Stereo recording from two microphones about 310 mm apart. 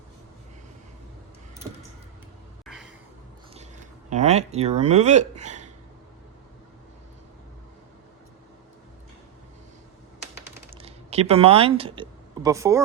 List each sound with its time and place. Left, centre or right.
4.1 s speech: right
10.8 s speech: centre